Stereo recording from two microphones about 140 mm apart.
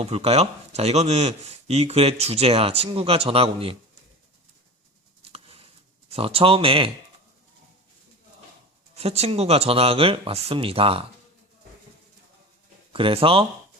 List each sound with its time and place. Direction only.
0.0 s speech: 50° right (ahead or behind)
5.3 s a sound: 45° right (ahead or behind)
6.1 s speech: 45° right (ahead or behind)
9.0 s speech: 45° right (ahead or behind)
12.9 s speech: 40° right (ahead or behind)